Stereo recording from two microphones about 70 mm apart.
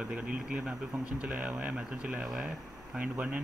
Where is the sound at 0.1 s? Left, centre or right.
Centre.